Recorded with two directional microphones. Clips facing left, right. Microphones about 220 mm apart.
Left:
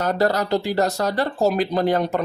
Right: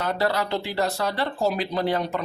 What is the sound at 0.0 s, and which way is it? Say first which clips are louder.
Speech: left 4 dB; 45° left (ahead or behind).